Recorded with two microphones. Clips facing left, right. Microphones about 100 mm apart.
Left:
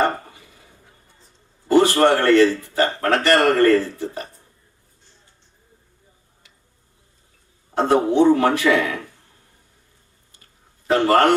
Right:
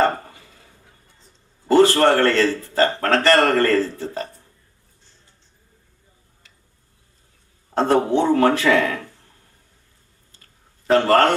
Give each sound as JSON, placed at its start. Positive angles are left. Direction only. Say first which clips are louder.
{"t": 1.7, "sound": "a man's voice", "louder": "right 1 dB", "side_deg": 15}
{"t": 7.8, "sound": "speech", "louder": "left 1 dB", "side_deg": 15}
{"t": 10.9, "sound": "speech", "louder": "even", "side_deg": 15}